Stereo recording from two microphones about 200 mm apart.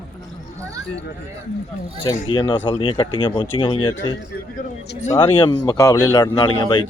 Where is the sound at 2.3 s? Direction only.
20° left (ahead or behind).